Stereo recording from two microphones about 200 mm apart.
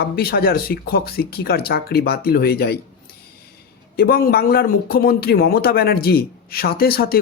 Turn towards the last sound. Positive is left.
turn(degrees=50)  # may be behind; listen again after turning